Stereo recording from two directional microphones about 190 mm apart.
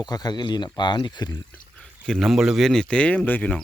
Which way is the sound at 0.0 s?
20° left (ahead or behind).